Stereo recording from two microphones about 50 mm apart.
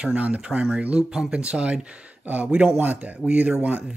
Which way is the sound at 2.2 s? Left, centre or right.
Right.